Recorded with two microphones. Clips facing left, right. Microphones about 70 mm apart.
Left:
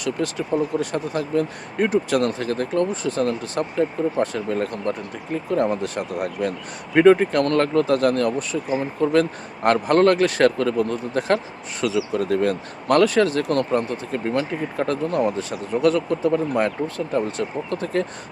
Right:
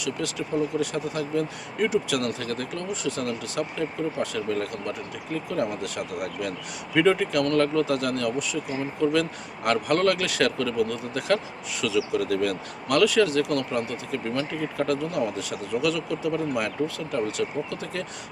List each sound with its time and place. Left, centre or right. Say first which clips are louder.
0.0 s speech: left 5 dB; left